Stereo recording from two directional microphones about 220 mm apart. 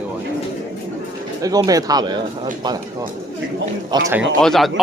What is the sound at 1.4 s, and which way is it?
Speech, 15° right (ahead or behind).